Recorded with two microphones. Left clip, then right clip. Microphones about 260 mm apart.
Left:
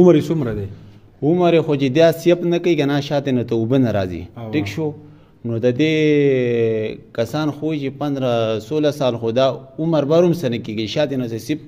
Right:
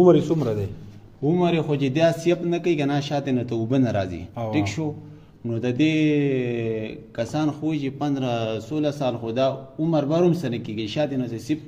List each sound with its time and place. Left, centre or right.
0.0 s speech: left